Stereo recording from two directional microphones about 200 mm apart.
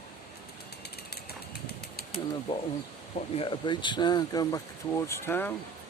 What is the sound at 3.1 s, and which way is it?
Speech, 30° left (ahead or behind).